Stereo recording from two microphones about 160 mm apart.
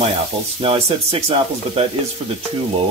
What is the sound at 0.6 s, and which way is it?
Speech, 40° right (ahead or behind).